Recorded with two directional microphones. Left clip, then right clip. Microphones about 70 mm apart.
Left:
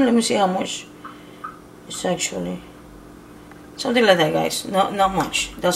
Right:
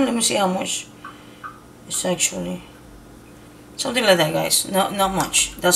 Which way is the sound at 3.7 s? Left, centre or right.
Left.